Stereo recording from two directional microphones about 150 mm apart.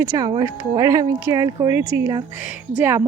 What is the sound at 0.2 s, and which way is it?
A woman's voice, 25° right (ahead or behind).